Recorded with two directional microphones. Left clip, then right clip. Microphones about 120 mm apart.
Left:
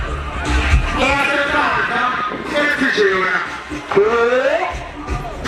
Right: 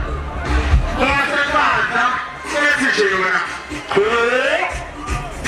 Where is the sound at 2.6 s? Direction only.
35° right (ahead or behind).